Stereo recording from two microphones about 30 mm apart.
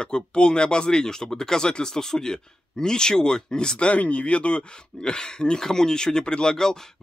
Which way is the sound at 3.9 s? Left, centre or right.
Left.